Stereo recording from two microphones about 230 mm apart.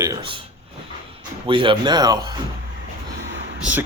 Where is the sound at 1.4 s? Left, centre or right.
Right.